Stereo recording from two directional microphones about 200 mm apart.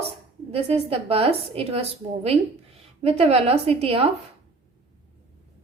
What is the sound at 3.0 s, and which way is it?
A woman's voice, 30° right (ahead or behind).